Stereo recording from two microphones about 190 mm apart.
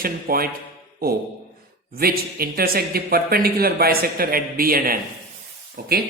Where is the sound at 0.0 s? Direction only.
50° right (ahead or behind).